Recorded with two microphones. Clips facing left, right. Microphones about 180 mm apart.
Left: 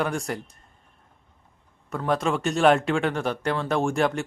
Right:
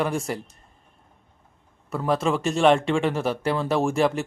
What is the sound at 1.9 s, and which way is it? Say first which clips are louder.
Speech: right 1 dB; centre (ahead or behind).